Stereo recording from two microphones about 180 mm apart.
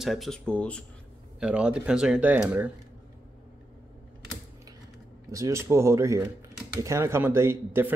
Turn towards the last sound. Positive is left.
turn(degrees=-15)  # may be behind; listen again after turning